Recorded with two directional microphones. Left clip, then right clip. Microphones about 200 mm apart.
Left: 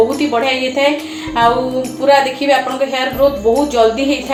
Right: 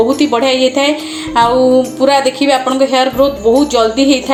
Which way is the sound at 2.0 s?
40° right (ahead or behind).